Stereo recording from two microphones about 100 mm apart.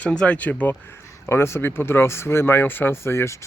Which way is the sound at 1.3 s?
25° left (ahead or behind).